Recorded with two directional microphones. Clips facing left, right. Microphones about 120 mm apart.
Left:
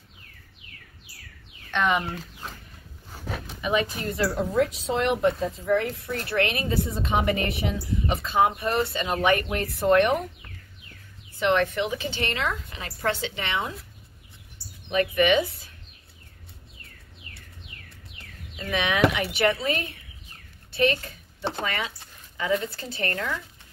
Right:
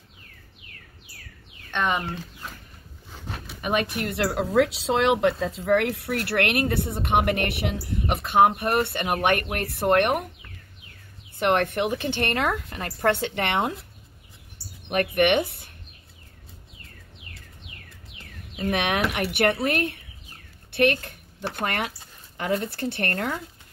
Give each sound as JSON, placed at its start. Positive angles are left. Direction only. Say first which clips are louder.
{"t": 3.6, "sound": "speech", "louder": "even", "side_deg": -60}
{"t": 11.3, "sound": "speech", "louder": "right 1 dB", "side_deg": -55}
{"t": 14.9, "sound": "speech", "louder": "even", "side_deg": -60}
{"t": 18.6, "sound": "speech", "louder": "left 1 dB", "side_deg": -60}